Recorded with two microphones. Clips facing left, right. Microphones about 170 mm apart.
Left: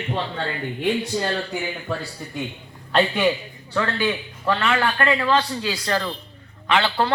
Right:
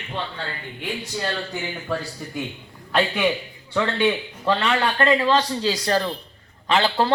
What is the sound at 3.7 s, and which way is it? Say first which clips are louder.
A man's voice: right 2 dB; 20° right (ahead or behind).